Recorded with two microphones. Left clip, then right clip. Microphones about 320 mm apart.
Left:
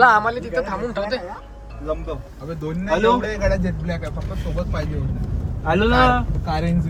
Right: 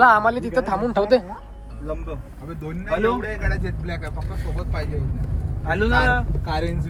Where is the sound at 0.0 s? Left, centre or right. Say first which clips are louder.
Even; centre.